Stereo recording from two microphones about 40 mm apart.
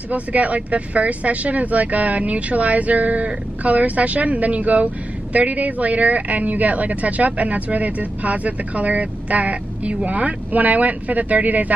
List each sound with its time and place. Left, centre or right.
0.1 s speech: right